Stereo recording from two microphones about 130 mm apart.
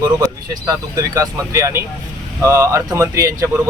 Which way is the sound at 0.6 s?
25° right (ahead or behind).